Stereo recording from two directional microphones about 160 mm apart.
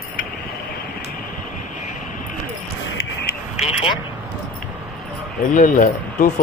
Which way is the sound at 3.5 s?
35° left (ahead or behind).